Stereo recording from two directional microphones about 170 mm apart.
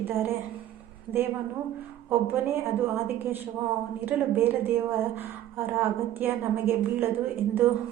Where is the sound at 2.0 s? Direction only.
10° right (ahead or behind).